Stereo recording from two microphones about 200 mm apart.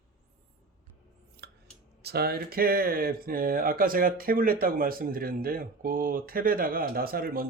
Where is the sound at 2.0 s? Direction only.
50° right (ahead or behind).